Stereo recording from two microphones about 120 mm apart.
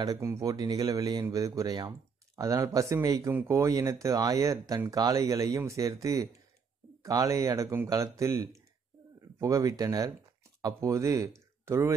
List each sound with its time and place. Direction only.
0.0 s speech: 25° right (ahead or behind)
7.0 s speech: 25° right (ahead or behind)